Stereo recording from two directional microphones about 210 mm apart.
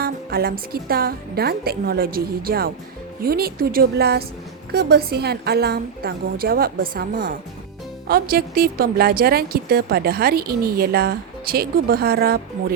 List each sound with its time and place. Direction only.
0.0 s a woman's voice: 45° right (ahead or behind)